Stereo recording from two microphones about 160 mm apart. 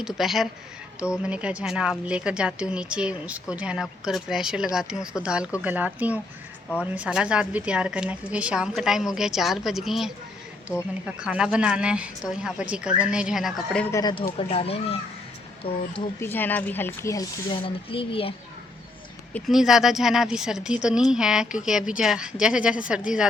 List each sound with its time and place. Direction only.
0.0 s a woman's voice: centre (ahead or behind)
10.7 s speech: 15° left (ahead or behind)
11.0 s speech: 5° right (ahead or behind)
13.8 s speech: 20° left (ahead or behind)
14.3 s speech: 35° left (ahead or behind)
16.2 s speech: 10° left (ahead or behind)
17.5 s speech: 35° left (ahead or behind)
19.3 s speech: centre (ahead or behind)